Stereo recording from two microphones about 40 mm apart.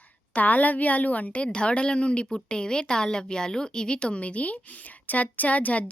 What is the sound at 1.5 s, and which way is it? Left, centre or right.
Speech, left.